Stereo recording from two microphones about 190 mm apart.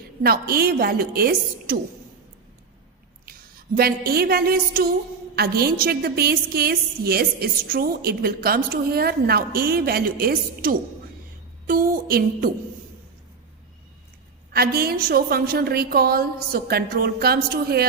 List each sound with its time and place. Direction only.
0.2 s a woman's voice: 55° right (ahead or behind)
3.8 s a woman's voice: 55° right (ahead or behind)
14.5 s a woman's voice: 55° right (ahead or behind)